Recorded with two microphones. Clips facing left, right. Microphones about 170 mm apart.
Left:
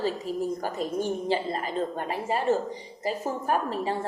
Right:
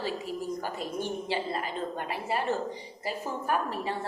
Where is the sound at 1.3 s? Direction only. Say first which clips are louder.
Left 4 dB; 40° left (ahead or behind).